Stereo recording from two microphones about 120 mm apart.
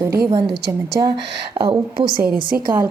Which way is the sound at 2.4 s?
40° right (ahead or behind).